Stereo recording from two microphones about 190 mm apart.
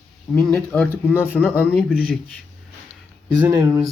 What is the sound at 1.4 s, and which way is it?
Speech, 10° right (ahead or behind).